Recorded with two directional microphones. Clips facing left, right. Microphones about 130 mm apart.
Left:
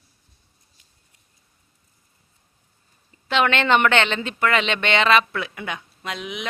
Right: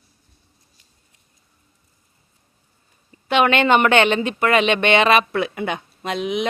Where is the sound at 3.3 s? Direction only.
15° right (ahead or behind).